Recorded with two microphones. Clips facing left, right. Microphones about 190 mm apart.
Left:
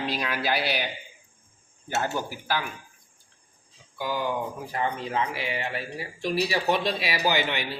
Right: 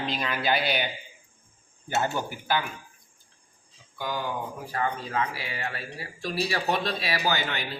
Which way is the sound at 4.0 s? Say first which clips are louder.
Left 2 dB; 10° left (ahead or behind).